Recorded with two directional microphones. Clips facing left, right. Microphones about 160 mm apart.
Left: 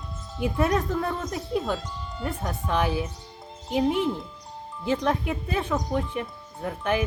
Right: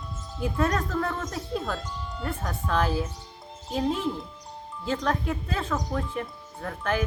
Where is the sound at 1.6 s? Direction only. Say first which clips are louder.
Left 3 dB; centre (ahead or behind).